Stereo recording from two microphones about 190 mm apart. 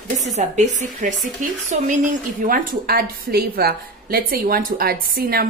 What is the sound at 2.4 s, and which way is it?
A woman's voice, 50° right (ahead or behind).